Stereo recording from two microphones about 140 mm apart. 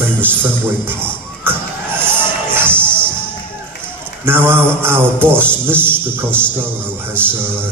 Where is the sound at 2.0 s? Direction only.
15° right (ahead or behind).